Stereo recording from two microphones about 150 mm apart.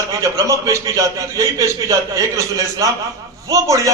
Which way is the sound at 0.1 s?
20° right (ahead or behind).